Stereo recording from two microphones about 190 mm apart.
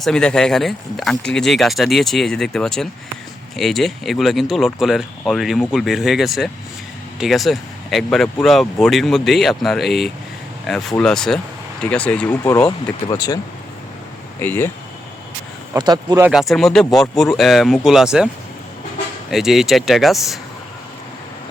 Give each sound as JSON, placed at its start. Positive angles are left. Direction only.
{"t": 0.0, "sound": "speech", "side_deg": 5}
{"t": 14.4, "sound": "speech", "side_deg": 10}
{"t": 15.7, "sound": "speech", "side_deg": -20}
{"t": 16.3, "sound": "speech", "side_deg": 0}
{"t": 19.3, "sound": "speech", "side_deg": 0}